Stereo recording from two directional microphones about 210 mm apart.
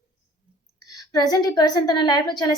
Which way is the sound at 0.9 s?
20° left (ahead or behind).